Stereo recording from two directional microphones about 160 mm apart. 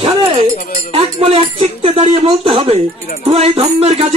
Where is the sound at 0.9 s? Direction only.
40° right (ahead or behind).